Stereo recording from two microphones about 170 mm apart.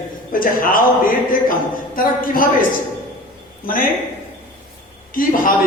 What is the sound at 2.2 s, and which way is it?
Speech, 55° left (ahead or behind).